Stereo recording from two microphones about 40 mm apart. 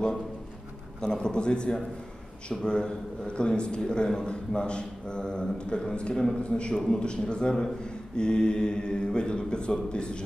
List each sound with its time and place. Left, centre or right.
1.0 s speech: centre